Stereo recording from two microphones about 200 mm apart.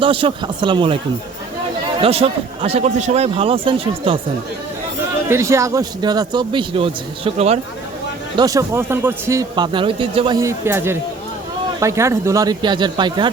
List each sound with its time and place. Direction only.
0.0 s a man's voice: 25° right (ahead or behind)
2.0 s a man's voice: 30° right (ahead or behind)
5.3 s a man's voice: 15° right (ahead or behind); by 7.6 s 30° right (ahead or behind)
8.4 s a man's voice: 15° right (ahead or behind)